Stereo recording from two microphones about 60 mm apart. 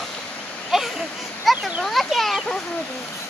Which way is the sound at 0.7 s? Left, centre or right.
Centre.